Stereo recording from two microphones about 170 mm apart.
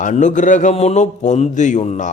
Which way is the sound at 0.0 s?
45° left (ahead or behind).